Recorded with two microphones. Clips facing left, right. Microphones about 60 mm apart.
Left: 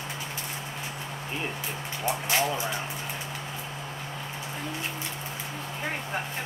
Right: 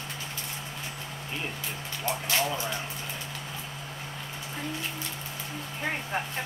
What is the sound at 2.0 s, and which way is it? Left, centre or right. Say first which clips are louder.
Speech: left 2 dB; left.